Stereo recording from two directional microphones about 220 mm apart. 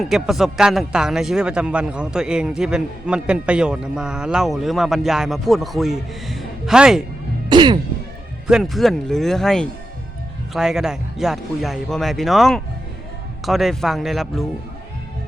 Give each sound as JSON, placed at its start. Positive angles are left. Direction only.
{"t": 0.0, "sound": "speech", "side_deg": 0}
{"t": 7.5, "sound": "speech", "side_deg": -20}
{"t": 8.4, "sound": "speech", "side_deg": 0}